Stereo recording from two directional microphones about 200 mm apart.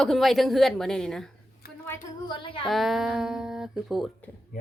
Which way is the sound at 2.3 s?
25° left (ahead or behind).